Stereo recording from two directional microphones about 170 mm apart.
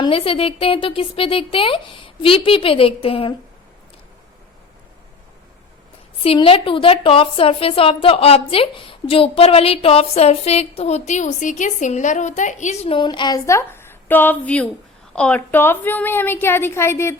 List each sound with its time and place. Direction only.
0.0 s a woman's voice: 35° left (ahead or behind)
6.2 s a woman's voice: 35° left (ahead or behind); by 17.2 s 15° left (ahead or behind)